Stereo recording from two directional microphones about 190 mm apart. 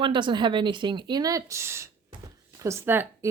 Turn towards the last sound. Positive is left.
turn(degrees=-10)  # may be behind; listen again after turning